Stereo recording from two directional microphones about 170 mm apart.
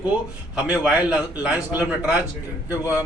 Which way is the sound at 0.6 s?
5° right (ahead or behind).